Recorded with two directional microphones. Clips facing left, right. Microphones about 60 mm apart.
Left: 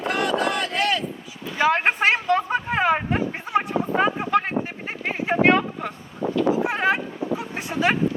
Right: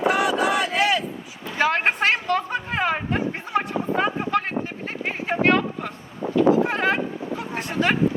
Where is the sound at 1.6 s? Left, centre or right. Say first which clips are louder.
Left 1 dB; left.